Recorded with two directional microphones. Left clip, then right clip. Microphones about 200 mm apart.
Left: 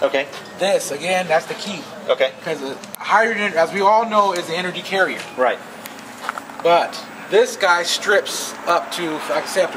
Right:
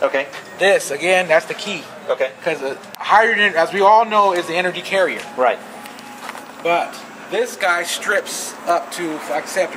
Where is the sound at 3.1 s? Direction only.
25° right (ahead or behind).